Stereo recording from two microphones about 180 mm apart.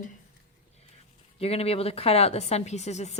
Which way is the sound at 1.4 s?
35° left (ahead or behind).